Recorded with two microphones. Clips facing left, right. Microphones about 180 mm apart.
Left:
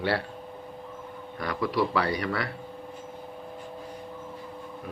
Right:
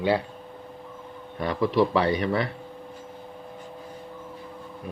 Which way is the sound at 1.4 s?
25° right (ahead or behind).